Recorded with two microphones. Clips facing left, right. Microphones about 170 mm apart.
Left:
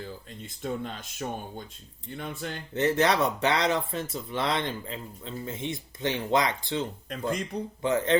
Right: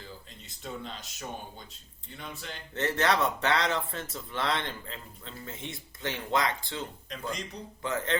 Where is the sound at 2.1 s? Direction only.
50° left (ahead or behind).